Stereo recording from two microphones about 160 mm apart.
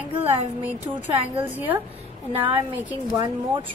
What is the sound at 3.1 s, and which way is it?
Speech, 30° right (ahead or behind).